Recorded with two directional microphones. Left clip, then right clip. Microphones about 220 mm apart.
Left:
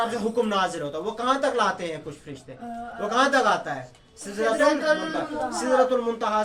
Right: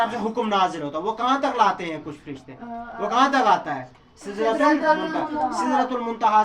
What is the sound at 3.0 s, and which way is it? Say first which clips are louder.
Speech: right 2 dB; 15° left (ahead or behind).